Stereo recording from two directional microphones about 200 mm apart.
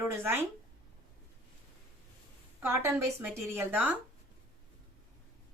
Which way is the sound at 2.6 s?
10° right (ahead or behind).